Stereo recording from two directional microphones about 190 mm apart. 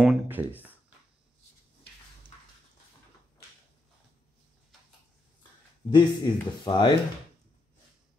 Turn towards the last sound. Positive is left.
turn(degrees=25)  # may be behind; listen again after turning